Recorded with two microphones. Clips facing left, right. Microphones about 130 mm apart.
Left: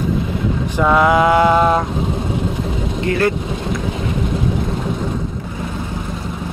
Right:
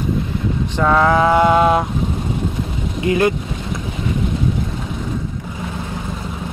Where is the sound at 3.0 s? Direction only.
20° right (ahead or behind).